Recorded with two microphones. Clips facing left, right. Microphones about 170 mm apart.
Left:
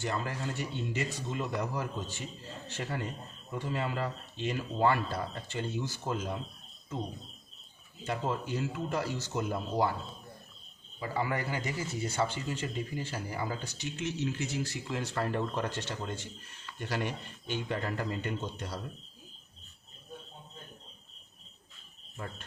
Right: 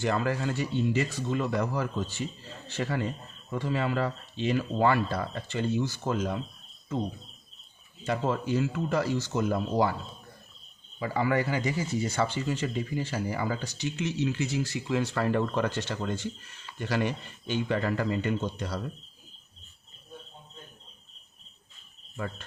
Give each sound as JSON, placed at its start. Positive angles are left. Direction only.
{"t": 0.0, "sound": "speech", "side_deg": -90}
{"t": 8.0, "sound": "speech", "side_deg": -90}
{"t": 11.0, "sound": "speech", "side_deg": -90}